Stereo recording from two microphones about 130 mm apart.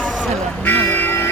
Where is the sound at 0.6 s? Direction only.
15° left (ahead or behind).